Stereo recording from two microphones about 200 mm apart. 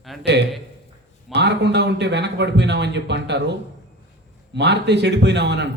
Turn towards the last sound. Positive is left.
turn(degrees=-60)  # may be behind; listen again after turning